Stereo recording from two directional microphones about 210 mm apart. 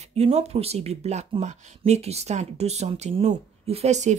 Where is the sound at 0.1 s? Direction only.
30° right (ahead or behind).